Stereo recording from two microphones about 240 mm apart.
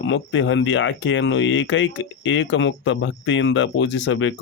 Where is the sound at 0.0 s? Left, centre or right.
Left.